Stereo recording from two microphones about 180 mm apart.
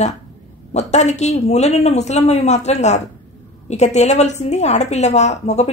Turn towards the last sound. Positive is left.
turn(degrees=40)  # may be behind; listen again after turning